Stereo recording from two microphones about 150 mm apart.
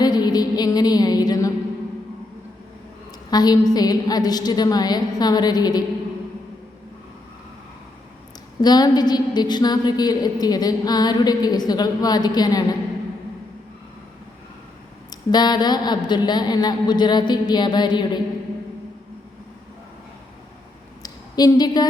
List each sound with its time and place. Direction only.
0.0 s music: 25° left (ahead or behind)
3.2 s a woman's voice: 25° left (ahead or behind)
8.6 s a woman's voice: 25° left (ahead or behind)
15.1 s a woman's voice: 30° left (ahead or behind)
21.0 s a sound: 25° left (ahead or behind)